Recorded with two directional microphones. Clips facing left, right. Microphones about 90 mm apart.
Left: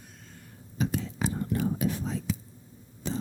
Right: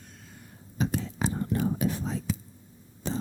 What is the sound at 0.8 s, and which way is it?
Whispering, 35° right (ahead or behind).